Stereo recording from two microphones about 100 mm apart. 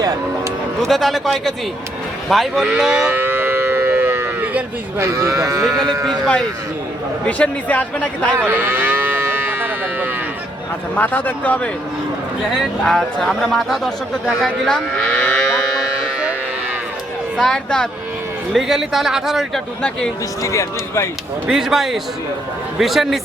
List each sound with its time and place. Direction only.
0.8 s speech: centre (ahead or behind)
2.6 s moo: 5° right (ahead or behind)
3.1 s moo: 20° right (ahead or behind)
4.9 s speech: 30° right (ahead or behind)
5.6 s a man's voice: centre (ahead or behind)
8.4 s moo: 20° right (ahead or behind)
10.9 s a man's voice: 15° left (ahead or behind)
12.8 s speech: 5° left (ahead or behind)
17.3 s a man's voice: 5° left (ahead or behind)
18.5 s speech: 5° right (ahead or behind)
19.8 s a man's voice: 10° left (ahead or behind)
20.4 s speech: 30° left (ahead or behind)
21.5 s speech: 5° right (ahead or behind)